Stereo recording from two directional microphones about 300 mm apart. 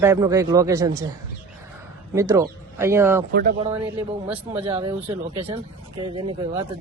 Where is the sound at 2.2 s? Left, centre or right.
Centre.